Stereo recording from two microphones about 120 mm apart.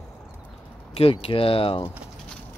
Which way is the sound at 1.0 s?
50° left (ahead or behind).